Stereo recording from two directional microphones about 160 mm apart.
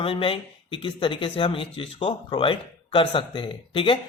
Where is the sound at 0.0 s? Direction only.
35° left (ahead or behind).